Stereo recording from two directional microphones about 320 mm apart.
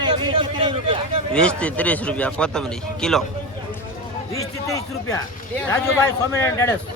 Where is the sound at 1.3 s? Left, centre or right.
Centre.